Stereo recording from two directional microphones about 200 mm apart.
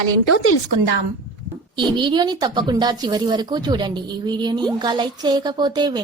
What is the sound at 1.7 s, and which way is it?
Speech, 25° right (ahead or behind).